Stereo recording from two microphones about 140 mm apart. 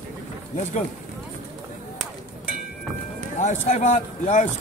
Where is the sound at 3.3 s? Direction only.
60° left (ahead or behind).